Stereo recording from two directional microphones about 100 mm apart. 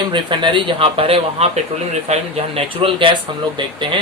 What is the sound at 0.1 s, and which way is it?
A man's voice, 50° right (ahead or behind).